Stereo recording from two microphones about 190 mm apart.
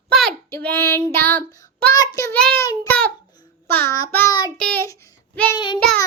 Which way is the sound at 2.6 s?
15° left (ahead or behind).